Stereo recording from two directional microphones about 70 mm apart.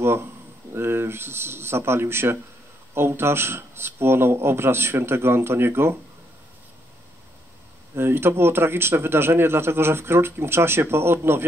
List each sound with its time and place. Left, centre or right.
0.0 s speech: right
7.9 s speech: right